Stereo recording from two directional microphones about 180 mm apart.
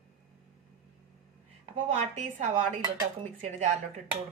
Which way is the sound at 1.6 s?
40° right (ahead or behind).